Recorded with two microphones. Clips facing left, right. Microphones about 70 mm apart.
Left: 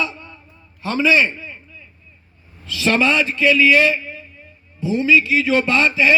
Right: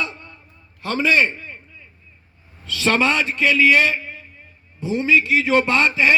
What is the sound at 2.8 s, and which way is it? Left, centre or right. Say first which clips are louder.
A man's voice: left 2 dB; right.